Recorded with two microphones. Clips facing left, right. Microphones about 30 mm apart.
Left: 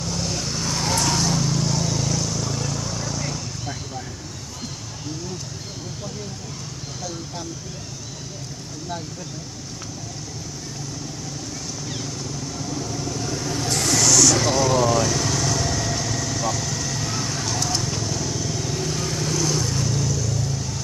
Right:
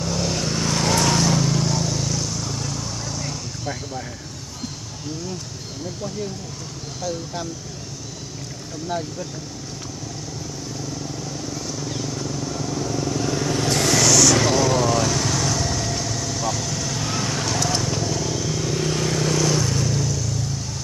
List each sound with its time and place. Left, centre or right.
0.0 s vehicle: centre
0.7 s vehicle: right
1.3 s vehicle: centre
1.7 s vehicle: centre
12.2 s vehicle: centre; by 14.0 s right
14.5 s vehicle: centre
17.1 s vehicle: right
17.8 s vehicle: centre
18.9 s vehicle: right
19.7 s vehicle: centre